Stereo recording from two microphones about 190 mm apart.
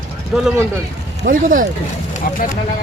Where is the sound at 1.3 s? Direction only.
45° right (ahead or behind).